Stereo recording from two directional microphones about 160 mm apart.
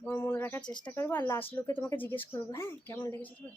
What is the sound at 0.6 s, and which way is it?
Speech, 25° left (ahead or behind).